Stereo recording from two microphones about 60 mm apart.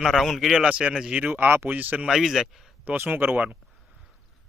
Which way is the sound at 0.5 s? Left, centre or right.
Centre.